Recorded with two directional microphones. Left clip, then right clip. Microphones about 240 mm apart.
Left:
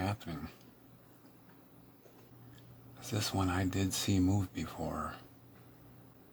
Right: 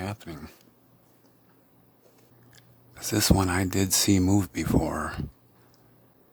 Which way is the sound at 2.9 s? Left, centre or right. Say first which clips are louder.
Right 12 dB; right.